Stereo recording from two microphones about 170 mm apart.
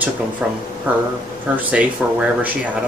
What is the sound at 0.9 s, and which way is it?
Speech, 10° right (ahead or behind).